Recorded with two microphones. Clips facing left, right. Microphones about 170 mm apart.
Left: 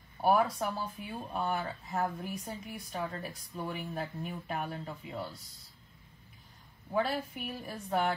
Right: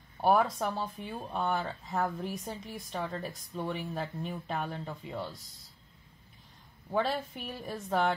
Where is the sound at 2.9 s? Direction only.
30° right (ahead or behind).